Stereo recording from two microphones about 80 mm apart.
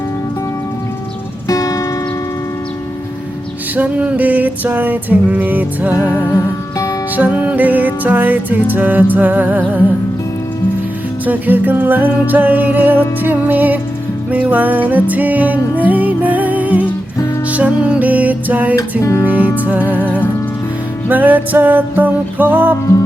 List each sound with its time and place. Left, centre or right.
1.5 s music: left
3.8 s music: centre
11.3 s music: right
18.8 s music: left
19.2 s music: right